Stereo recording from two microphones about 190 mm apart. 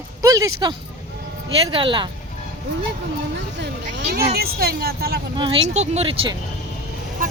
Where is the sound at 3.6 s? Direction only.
65° right (ahead or behind).